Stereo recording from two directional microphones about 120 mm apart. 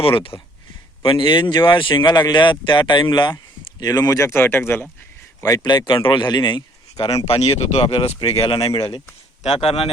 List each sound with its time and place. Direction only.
0.0 s speech: 50° left (ahead or behind); by 5.6 s 25° left (ahead or behind)
5.6 s speech: 40° left (ahead or behind)
7.3 s speech: 55° left (ahead or behind)
9.4 s speech: 55° left (ahead or behind)